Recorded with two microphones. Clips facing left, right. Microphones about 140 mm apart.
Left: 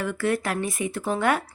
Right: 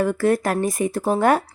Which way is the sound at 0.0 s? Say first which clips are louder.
Right 6 dB; 40° right (ahead or behind).